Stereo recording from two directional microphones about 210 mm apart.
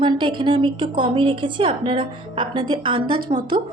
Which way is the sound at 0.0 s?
25° right (ahead or behind).